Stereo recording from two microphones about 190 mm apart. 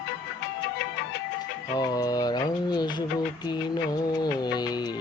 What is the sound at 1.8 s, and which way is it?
Mantra, 20° left (ahead or behind).